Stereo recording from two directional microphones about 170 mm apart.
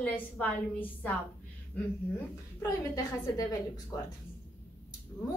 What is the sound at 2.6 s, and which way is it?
Speech, 20° left (ahead or behind).